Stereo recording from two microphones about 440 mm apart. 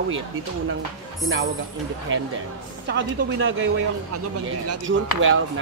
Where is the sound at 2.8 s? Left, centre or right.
Right.